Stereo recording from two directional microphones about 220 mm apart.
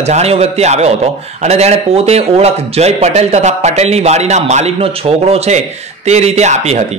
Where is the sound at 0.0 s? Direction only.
30° right (ahead or behind).